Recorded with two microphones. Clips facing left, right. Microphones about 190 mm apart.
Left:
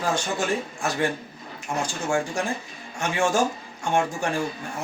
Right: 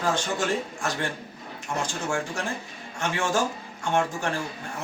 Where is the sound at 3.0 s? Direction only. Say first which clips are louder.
Left 3 dB; 10° left (ahead or behind).